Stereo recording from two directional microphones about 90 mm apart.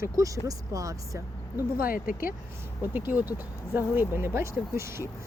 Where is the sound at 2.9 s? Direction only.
20° right (ahead or behind).